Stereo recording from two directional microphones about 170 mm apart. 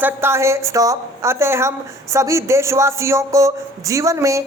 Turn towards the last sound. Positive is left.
turn(degrees=-20)  # may be behind; listen again after turning